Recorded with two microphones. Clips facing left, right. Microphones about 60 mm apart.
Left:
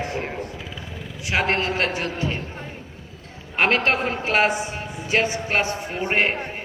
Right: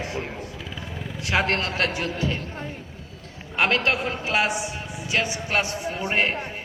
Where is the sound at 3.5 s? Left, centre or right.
Left.